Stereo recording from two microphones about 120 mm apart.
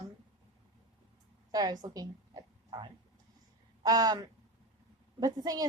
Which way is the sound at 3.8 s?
30° right (ahead or behind).